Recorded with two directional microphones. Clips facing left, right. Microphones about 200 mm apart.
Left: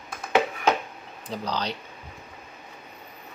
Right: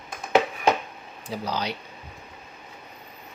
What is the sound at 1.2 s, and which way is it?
Speech, 10° right (ahead or behind).